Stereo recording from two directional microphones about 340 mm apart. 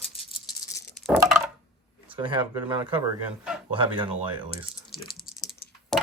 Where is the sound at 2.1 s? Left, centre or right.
Centre.